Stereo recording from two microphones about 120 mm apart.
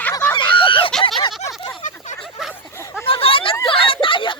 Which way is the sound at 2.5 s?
20° left (ahead or behind).